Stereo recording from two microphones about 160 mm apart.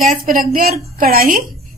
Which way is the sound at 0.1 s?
55° right (ahead or behind).